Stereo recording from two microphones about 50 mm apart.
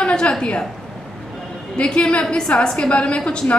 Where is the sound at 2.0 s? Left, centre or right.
Left.